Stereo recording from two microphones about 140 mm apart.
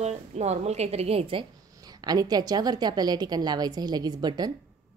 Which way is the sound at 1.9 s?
30° right (ahead or behind).